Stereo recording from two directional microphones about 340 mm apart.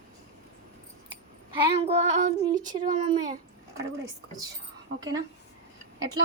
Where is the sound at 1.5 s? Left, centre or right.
Centre.